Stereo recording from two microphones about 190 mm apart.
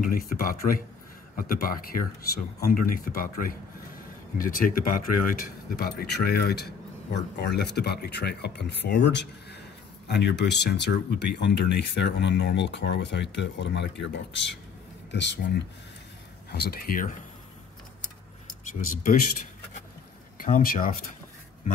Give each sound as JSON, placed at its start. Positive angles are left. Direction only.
{"t": 0.0, "sound": "speech", "side_deg": 50}
{"t": 15.0, "sound": "speech", "side_deg": 70}
{"t": 16.5, "sound": "speech", "side_deg": 55}
{"t": 18.7, "sound": "speech", "side_deg": 45}
{"t": 20.4, "sound": "speech", "side_deg": 45}